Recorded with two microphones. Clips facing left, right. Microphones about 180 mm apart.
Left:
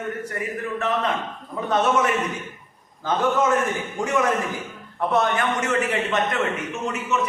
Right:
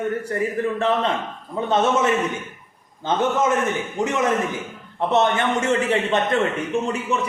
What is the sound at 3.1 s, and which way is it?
A man's voice, 25° right (ahead or behind).